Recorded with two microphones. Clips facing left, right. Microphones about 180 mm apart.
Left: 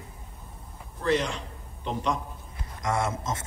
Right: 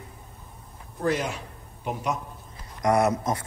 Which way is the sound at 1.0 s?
5° right (ahead or behind).